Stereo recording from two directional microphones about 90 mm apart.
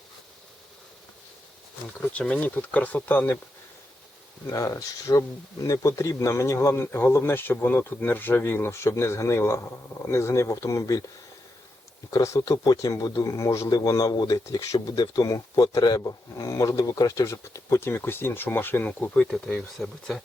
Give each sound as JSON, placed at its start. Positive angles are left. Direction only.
{"t": 2.0, "sound": "speech", "side_deg": 10}
{"t": 4.5, "sound": "speech", "side_deg": 40}
{"t": 12.1, "sound": "a man's voice", "side_deg": 30}